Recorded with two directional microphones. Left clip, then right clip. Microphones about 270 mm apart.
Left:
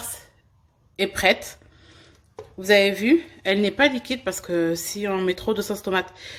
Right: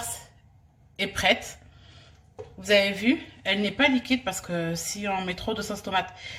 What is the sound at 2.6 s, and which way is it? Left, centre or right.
A woman's voice, left.